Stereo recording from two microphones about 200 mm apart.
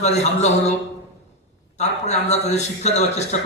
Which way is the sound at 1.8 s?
35° left (ahead or behind).